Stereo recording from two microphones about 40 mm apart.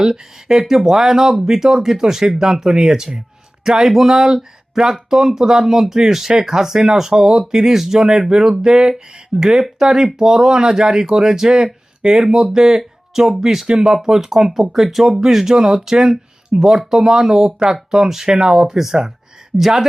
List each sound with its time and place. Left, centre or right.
0.0 s speech: centre
13.7 s speech: right
14.0 s speech: centre